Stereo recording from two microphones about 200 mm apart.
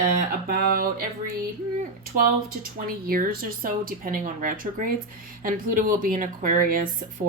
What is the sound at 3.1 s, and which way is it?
A woman's voice, 45° right (ahead or behind).